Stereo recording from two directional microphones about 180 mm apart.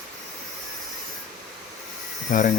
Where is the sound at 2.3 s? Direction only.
45° left (ahead or behind).